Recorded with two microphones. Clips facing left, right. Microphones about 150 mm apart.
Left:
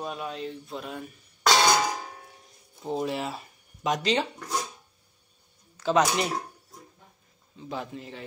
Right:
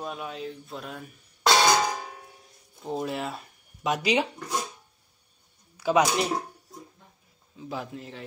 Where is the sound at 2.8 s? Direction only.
Centre (ahead or behind).